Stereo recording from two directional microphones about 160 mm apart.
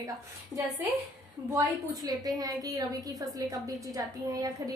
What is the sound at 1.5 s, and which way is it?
A woman's voice, 20° right (ahead or behind).